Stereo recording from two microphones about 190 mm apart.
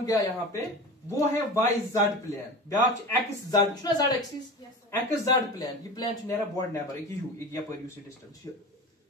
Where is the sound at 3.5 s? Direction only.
20° left (ahead or behind).